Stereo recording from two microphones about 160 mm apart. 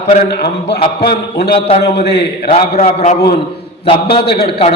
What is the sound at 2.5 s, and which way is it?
A man's voice, 40° left (ahead or behind).